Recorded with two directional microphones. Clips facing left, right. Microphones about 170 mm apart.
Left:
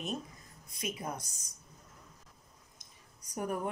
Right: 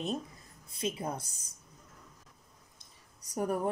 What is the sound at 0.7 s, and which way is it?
Speech, 30° right (ahead or behind).